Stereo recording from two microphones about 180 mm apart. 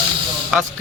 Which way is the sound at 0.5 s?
5° right (ahead or behind).